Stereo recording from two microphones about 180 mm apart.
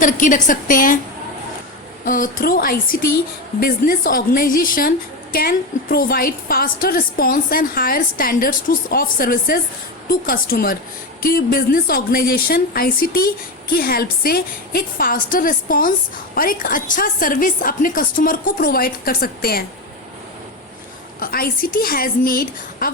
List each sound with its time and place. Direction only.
0.0 s a woman's voice: 45° left (ahead or behind)
2.0 s a woman's voice: 55° left (ahead or behind)
21.2 s a woman's voice: 55° left (ahead or behind)